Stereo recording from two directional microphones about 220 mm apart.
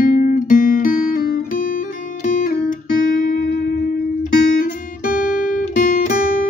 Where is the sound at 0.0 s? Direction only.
40° left (ahead or behind).